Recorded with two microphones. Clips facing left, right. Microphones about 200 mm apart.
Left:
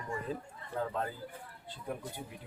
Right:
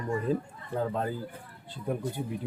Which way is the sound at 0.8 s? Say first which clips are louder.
Right 5 dB; 35° right (ahead or behind).